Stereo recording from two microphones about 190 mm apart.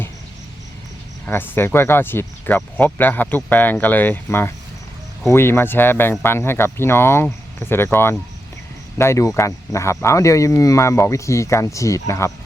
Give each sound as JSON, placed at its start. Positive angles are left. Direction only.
{"t": 1.3, "sound": "speech", "side_deg": 10}